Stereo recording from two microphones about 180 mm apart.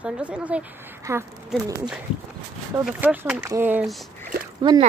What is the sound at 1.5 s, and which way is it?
Speech, centre (ahead or behind).